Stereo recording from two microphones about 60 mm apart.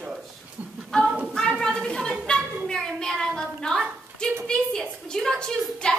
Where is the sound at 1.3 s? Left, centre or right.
Centre.